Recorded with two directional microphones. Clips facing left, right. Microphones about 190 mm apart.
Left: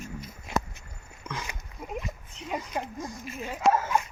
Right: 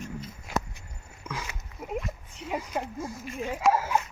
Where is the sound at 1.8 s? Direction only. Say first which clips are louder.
Right 2 dB; 5° right (ahead or behind).